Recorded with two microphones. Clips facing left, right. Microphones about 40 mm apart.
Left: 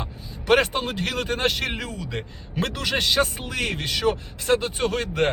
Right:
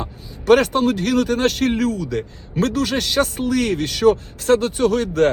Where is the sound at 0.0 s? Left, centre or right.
Left.